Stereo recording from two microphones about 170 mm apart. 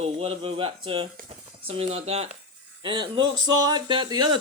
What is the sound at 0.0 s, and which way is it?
Speech, 35° right (ahead or behind).